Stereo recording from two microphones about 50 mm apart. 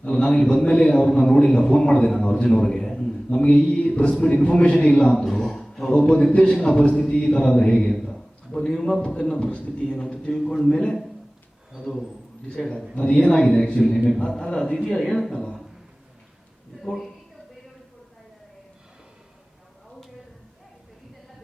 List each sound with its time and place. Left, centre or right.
0.2 s a man's voice: centre
5.1 s speech: centre
5.9 s a man's voice: centre
10.7 s a man's voice: centre
11.8 s a man's voice: centre; by 13.3 s left
13.3 s a man's voice: centre